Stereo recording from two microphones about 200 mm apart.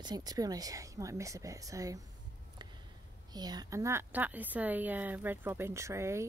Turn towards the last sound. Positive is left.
turn(degrees=-15)  # may be behind; listen again after turning